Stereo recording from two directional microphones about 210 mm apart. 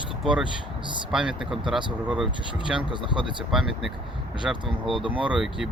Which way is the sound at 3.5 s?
Centre (ahead or behind).